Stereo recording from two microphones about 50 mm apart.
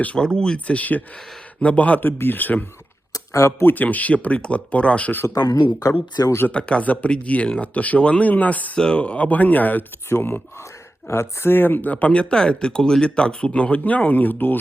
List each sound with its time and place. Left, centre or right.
0.2 s speech: centre
0.8 s speech: left
2.1 s speech: left
3.8 s speech: left
5.9 s speech: left
6.5 s speech: left
10.1 s speech: left
11.5 s speech: left